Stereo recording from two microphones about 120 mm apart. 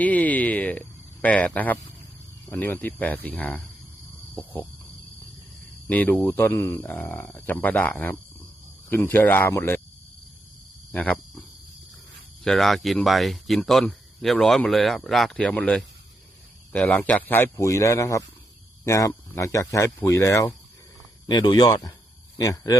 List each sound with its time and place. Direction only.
0.0 s a sound: 15° left (ahead or behind)
2.6 s speech: 15° left (ahead or behind)
5.9 s speech: 15° left (ahead or behind)
10.9 s speech: 15° left (ahead or behind)
21.2 s speech: 35° left (ahead or behind)